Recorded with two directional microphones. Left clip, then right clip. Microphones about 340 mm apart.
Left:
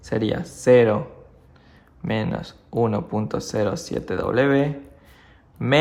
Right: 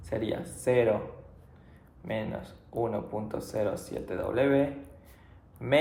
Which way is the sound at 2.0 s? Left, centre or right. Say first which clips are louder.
Left 8 dB; left.